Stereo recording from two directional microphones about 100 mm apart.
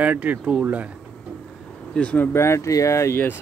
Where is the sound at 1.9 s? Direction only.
15° left (ahead or behind).